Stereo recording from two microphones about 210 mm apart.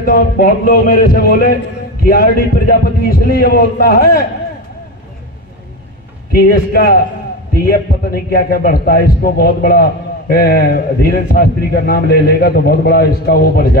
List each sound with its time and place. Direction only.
0.0 s a man's voice: 45° left (ahead or behind)
6.3 s a man's voice: 45° left (ahead or behind)